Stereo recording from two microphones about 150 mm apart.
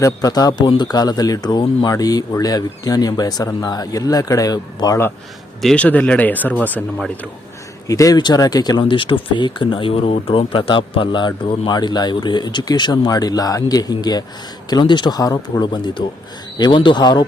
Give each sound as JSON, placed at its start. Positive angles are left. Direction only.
{"t": 0.0, "sound": "speech", "side_deg": 25}
{"t": 5.6, "sound": "speech", "side_deg": 10}
{"t": 7.9, "sound": "speech", "side_deg": 25}